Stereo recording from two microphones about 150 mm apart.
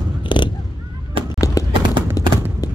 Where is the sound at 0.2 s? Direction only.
30° left (ahead or behind).